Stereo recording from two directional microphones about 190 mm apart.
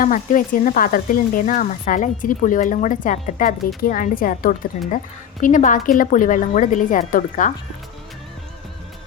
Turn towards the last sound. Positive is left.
turn(degrees=45)  # may be behind; listen again after turning